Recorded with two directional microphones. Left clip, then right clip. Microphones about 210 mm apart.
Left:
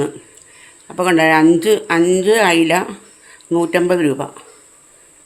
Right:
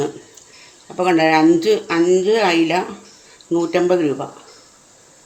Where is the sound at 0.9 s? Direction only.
25° left (ahead or behind).